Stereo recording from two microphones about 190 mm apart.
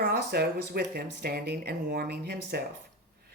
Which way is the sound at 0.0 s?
55° right (ahead or behind).